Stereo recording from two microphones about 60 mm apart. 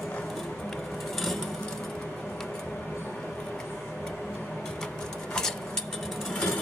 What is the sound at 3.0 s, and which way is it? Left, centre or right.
Vehicle, centre.